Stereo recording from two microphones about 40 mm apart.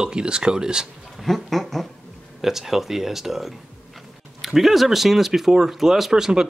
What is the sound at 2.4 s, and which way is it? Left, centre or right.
Speech, centre.